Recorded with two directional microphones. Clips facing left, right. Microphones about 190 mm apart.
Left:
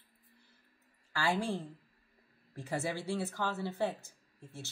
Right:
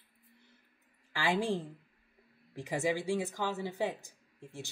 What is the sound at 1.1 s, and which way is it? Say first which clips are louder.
Speech: right 2 dB; 15° right (ahead or behind).